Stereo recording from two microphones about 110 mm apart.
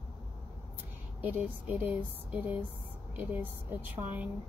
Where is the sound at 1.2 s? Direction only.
15° right (ahead or behind).